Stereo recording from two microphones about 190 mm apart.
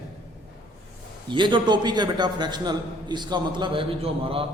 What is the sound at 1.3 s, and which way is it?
A man's voice, 25° right (ahead or behind).